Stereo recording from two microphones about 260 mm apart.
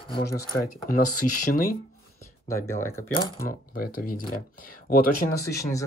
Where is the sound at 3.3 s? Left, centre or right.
Left.